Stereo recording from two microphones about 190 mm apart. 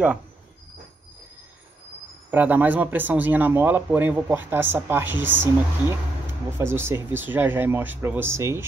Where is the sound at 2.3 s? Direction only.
10° right (ahead or behind).